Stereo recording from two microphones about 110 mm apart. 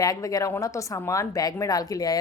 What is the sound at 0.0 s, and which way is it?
A woman's voice, 30° left (ahead or behind).